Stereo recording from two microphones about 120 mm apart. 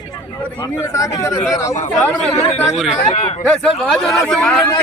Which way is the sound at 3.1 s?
55° left (ahead or behind).